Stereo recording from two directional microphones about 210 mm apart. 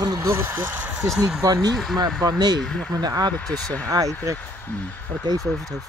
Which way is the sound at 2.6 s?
5° left (ahead or behind).